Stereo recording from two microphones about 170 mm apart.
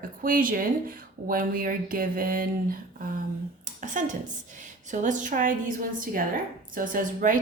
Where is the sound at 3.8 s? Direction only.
50° right (ahead or behind).